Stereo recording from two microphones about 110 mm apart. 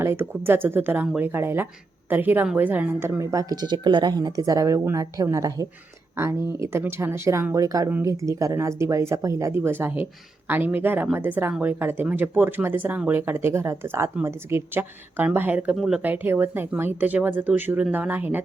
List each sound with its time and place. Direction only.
0.0 s speech: 20° right (ahead or behind)
3.2 s speech: 35° right (ahead or behind); by 16.0 s 5° right (ahead or behind)
16.0 s speech: 20° right (ahead or behind)